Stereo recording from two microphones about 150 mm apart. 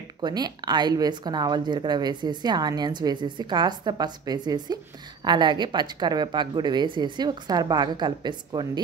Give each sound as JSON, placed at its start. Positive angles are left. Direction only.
{"t": 0.2, "sound": "a woman's voice", "side_deg": -30}